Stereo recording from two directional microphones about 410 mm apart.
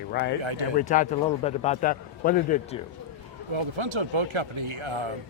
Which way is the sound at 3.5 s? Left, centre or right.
Right.